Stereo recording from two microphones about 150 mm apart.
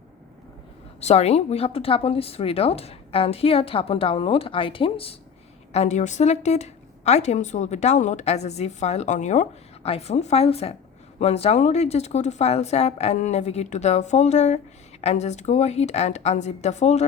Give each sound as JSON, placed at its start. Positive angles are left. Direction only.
{"t": 1.0, "sound": "speech", "side_deg": 45}
{"t": 5.7, "sound": "a woman's voice", "side_deg": 50}